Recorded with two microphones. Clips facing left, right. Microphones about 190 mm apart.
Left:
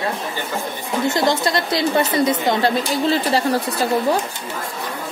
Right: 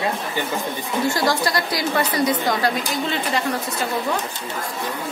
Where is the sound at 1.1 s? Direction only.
20° left (ahead or behind).